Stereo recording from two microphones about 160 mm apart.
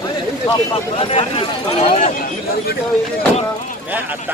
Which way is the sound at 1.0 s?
35° left (ahead or behind).